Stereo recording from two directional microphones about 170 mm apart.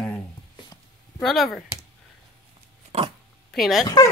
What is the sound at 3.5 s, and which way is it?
Speech, centre (ahead or behind).